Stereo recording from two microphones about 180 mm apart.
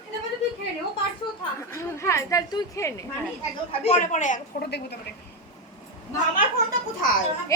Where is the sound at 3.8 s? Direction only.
40° left (ahead or behind).